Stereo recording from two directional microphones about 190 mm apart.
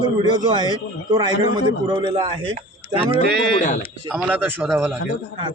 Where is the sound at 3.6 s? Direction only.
40° left (ahead or behind).